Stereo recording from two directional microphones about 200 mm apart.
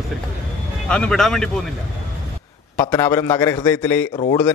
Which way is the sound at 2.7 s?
10° left (ahead or behind).